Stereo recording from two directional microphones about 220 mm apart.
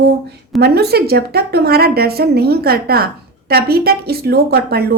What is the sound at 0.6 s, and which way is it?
A woman's voice, 45° right (ahead or behind).